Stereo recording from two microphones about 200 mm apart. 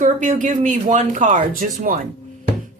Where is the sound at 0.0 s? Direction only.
40° right (ahead or behind).